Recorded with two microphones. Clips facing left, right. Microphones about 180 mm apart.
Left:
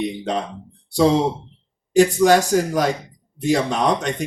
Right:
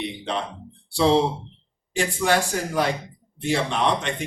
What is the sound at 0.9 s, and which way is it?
Speech, 40° left (ahead or behind).